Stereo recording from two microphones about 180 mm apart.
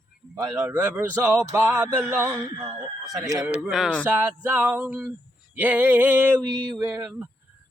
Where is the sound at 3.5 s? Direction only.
5° right (ahead or behind).